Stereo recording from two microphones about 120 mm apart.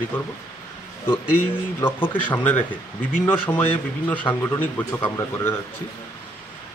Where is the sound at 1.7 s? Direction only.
15° left (ahead or behind).